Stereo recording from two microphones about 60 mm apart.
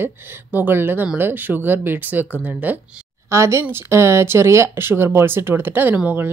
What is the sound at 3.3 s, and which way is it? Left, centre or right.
Speech, right.